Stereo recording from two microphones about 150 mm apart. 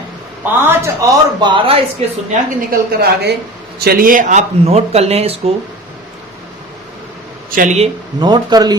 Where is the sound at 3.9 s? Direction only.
70° right (ahead or behind); by 5.5 s 45° right (ahead or behind).